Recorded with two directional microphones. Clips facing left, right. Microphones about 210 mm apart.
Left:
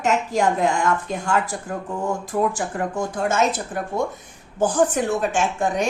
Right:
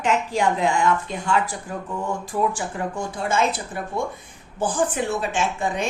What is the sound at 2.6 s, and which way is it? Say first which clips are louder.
A woman's voice: left 3 dB; 45° left (ahead or behind).